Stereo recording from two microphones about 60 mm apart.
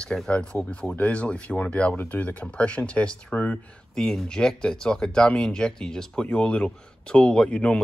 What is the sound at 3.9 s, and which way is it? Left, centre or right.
Speech, centre.